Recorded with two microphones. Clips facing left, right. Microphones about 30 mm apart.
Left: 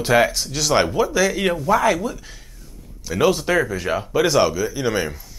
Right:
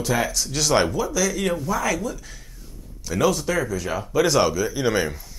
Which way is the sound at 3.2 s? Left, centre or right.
Left.